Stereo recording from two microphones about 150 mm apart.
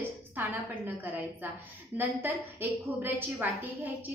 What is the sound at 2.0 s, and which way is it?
A woman's voice, 10° right (ahead or behind).